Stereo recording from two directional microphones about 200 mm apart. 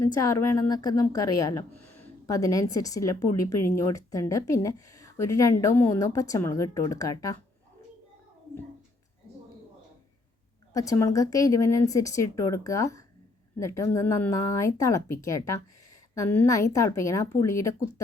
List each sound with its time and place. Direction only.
0.0 s a woman's voice: 15° left (ahead or behind)
10.8 s a woman's voice: 15° left (ahead or behind)